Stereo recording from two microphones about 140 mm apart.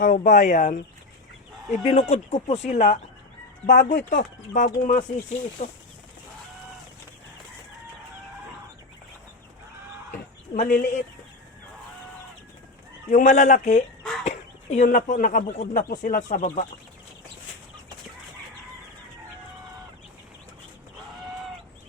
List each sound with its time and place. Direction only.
0.0 s speech: 65° left (ahead or behind)
1.7 s speech: 50° left (ahead or behind)
3.7 s speech: 70° left (ahead or behind)
5.6 s speech: 50° left (ahead or behind)
10.5 s speech: 80° left
13.1 s speech: 65° left (ahead or behind)
14.3 s chicken: 55° left (ahead or behind)
14.8 s speech: 70° left (ahead or behind)
15.8 s speech: 70° left (ahead or behind)